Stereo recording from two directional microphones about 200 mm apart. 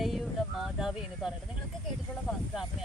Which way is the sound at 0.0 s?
Centre (ahead or behind).